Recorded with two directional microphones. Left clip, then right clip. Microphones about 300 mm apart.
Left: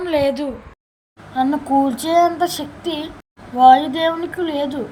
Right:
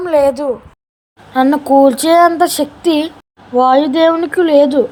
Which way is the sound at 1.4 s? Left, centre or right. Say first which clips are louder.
Right 8 dB; right.